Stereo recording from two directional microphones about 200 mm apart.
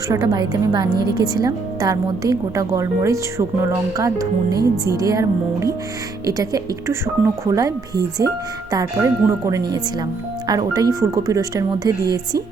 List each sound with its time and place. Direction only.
0.1 s a woman's voice: 20° right (ahead or behind)